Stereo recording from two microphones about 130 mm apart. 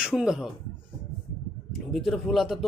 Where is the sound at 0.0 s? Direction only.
5° right (ahead or behind).